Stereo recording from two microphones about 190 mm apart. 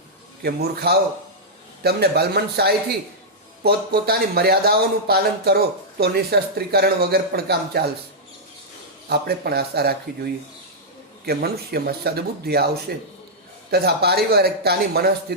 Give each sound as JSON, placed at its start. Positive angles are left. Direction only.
{"t": 0.4, "sound": "speech", "side_deg": -55}
{"t": 9.0, "sound": "speech", "side_deg": -55}
{"t": 11.3, "sound": "speech", "side_deg": -55}